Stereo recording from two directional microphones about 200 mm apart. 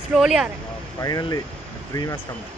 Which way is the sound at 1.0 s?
20° left (ahead or behind).